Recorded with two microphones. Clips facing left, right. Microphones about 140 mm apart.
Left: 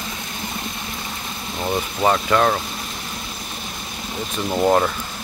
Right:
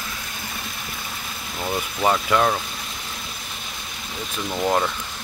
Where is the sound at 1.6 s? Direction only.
15° left (ahead or behind).